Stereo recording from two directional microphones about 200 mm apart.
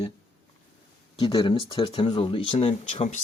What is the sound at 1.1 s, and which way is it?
Speech, 20° left (ahead or behind).